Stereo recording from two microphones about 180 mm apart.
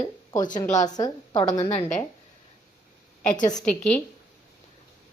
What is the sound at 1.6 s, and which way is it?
Speech, 35° left (ahead or behind).